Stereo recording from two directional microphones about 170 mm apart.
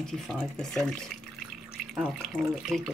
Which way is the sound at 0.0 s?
5° left (ahead or behind).